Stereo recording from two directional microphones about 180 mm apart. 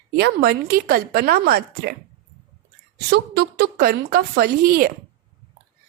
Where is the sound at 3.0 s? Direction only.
65° right (ahead or behind).